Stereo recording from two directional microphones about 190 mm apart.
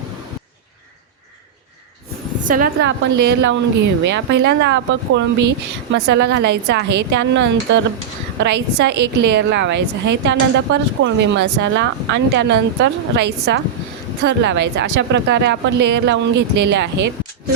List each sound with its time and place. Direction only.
2.5 s a woman's voice: 45° right (ahead or behind)
2.8 s a woman's voice: 65° right (ahead or behind)